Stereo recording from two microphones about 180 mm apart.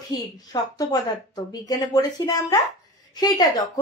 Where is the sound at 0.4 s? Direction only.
20° left (ahead or behind).